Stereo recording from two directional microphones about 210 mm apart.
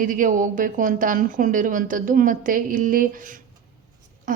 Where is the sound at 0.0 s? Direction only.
40° right (ahead or behind).